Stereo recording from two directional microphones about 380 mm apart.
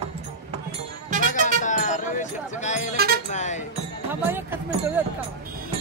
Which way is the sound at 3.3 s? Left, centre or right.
Centre.